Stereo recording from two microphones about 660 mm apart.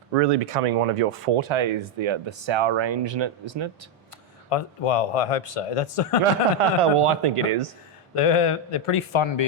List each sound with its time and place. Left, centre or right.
0.3 s speech: right
4.4 s a man's voice: left
6.6 s speech: right
8.1 s speech: left